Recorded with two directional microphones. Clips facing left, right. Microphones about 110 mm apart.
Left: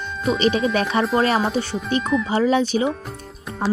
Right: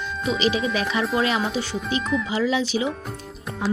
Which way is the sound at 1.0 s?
40° left (ahead or behind).